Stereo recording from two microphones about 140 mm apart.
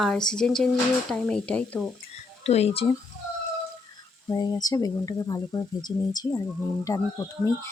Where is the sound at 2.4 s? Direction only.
45° left (ahead or behind).